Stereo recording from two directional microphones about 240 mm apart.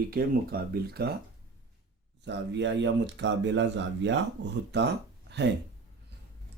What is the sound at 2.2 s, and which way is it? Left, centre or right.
Speech, right.